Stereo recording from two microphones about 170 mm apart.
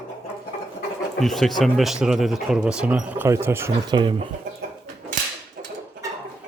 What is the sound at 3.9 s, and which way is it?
Speech, 30° right (ahead or behind).